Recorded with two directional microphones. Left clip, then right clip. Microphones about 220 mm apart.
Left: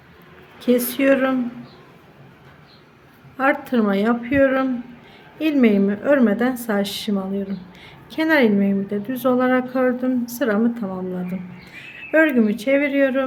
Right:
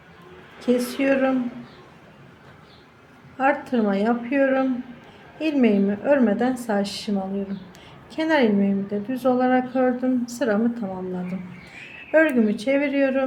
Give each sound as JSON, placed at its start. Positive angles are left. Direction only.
{"t": 0.9, "sound": "a woman's voice", "side_deg": 20}
{"t": 3.3, "sound": "a woman's voice", "side_deg": 15}